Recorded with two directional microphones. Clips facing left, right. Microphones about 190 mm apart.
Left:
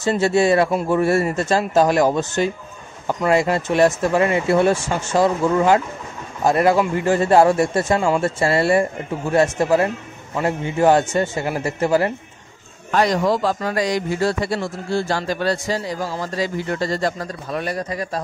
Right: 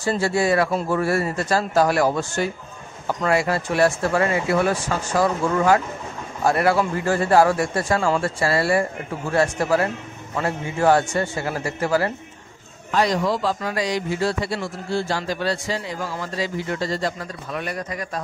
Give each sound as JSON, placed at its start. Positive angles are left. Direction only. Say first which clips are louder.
{"t": 0.2, "sound": "speech", "louder": "left 5 dB", "side_deg": 25}
{"t": 12.9, "sound": "a man's voice", "louder": "left 3 dB", "side_deg": 50}